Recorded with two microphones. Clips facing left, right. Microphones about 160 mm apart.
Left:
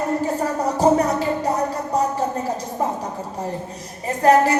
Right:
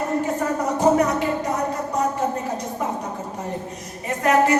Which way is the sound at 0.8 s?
35° left (ahead or behind).